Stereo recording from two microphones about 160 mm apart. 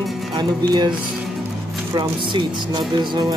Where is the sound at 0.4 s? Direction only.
30° right (ahead or behind).